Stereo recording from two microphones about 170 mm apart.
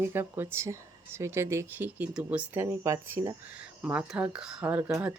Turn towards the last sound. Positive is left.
turn(degrees=-10)  # may be behind; listen again after turning